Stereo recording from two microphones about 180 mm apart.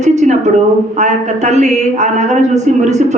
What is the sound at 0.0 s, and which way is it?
A woman's voice, 40° right (ahead or behind).